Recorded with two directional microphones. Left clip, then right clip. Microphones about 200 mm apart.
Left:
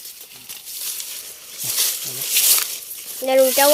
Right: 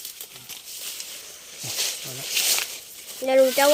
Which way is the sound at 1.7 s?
55° left (ahead or behind).